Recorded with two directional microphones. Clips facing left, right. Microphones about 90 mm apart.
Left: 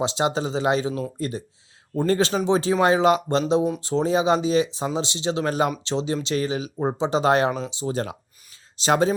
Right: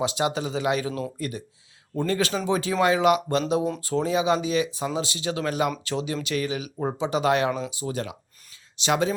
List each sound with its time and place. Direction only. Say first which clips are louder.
0.0 s speech: left 2 dB; 30° left (ahead or behind)